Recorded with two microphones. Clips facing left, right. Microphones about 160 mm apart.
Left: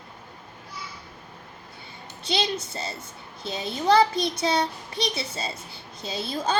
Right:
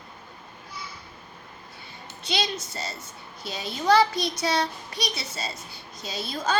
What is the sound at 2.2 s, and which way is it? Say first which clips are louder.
A woman's voice: left 2 dB; 30° left (ahead or behind).